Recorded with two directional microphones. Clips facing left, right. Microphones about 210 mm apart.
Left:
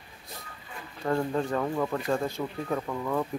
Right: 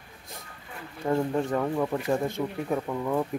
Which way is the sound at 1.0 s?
15° right (ahead or behind).